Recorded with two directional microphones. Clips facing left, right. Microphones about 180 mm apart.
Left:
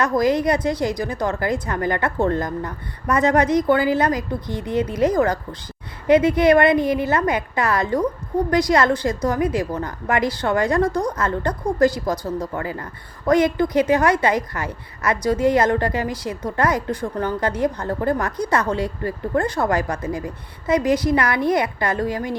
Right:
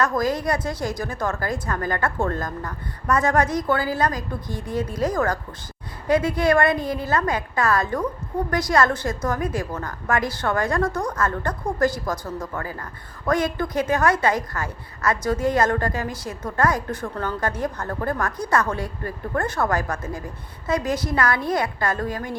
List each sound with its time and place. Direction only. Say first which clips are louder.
0.0 s a woman's voice: left 4 dB; 20° left (ahead or behind)